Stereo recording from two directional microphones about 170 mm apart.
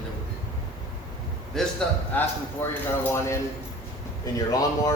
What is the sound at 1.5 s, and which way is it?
A man's voice, 5° left (ahead or behind).